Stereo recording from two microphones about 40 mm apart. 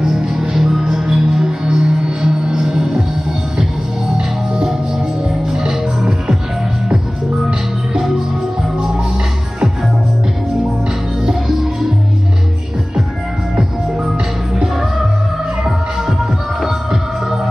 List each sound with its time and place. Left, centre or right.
0.0 s music: centre
5.5 s music: centre
14.0 s music: centre
16.6 s music: centre